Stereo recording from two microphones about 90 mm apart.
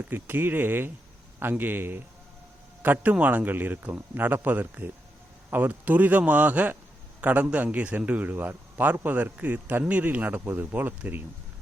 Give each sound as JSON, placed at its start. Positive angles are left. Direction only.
{"t": 0.0, "sound": "a man's voice", "side_deg": -20}